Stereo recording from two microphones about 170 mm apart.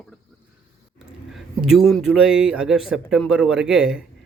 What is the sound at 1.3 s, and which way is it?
A man's voice, centre (ahead or behind).